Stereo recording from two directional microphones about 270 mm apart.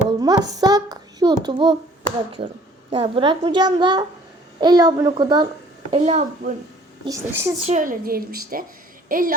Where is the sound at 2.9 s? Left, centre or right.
Centre.